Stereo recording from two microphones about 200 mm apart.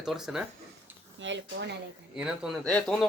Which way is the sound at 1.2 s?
65° right (ahead or behind).